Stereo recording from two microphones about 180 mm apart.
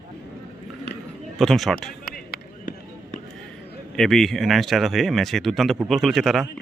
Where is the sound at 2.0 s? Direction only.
55° left (ahead or behind).